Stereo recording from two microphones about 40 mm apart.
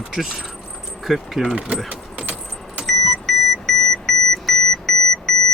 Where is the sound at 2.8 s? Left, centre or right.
Centre.